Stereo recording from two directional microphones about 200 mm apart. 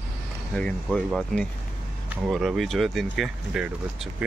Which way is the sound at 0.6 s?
5° left (ahead or behind).